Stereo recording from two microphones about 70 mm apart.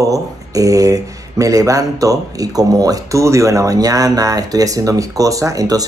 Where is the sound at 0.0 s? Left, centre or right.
Right.